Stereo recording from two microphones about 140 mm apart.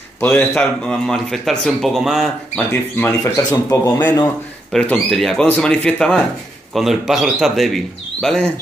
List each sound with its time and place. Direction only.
0.2 s speech: 15° left (ahead or behind); by 2.3 s centre (ahead or behind)
2.5 s speech: 10° left (ahead or behind)
4.7 s speech: 5° left (ahead or behind)